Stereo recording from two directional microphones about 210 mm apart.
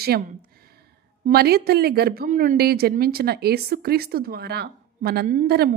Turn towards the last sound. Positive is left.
turn(degrees=-50)  # may be behind; listen again after turning